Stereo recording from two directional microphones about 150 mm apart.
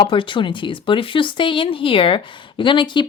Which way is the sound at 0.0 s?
35° left (ahead or behind).